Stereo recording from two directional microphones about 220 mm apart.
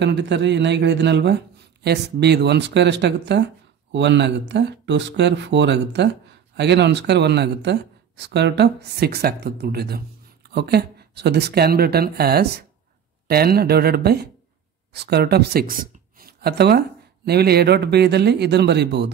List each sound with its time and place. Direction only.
0.0 s speech: 50° right (ahead or behind)